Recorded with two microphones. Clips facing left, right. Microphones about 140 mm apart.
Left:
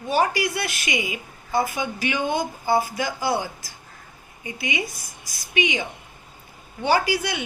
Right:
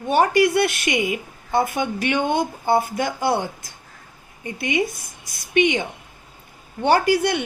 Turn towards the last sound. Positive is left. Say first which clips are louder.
# right 5 dB
turn(degrees=-60)  # may be behind; listen again after turning